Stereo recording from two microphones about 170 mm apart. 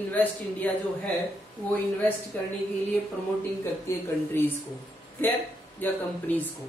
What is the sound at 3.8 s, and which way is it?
Speech, 15° left (ahead or behind).